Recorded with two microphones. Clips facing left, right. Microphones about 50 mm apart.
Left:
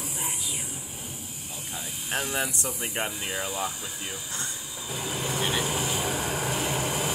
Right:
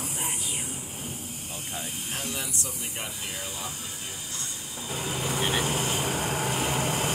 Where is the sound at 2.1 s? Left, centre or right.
Left.